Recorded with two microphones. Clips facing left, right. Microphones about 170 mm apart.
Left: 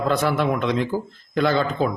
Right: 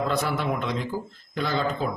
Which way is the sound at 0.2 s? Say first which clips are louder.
Left 5 dB; 90° left.